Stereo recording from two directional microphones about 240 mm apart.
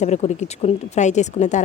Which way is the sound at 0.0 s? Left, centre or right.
Left.